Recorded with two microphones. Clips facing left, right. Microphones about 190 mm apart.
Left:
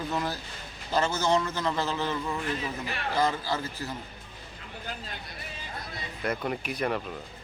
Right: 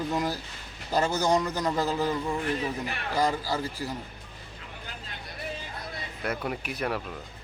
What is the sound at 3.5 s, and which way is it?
Speech, 10° right (ahead or behind).